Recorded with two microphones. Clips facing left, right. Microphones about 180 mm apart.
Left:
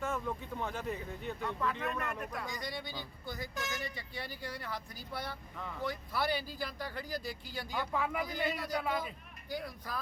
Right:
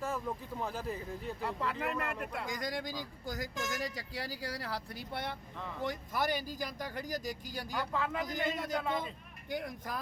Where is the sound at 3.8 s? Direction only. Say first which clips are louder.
Right 3 dB; 90° right.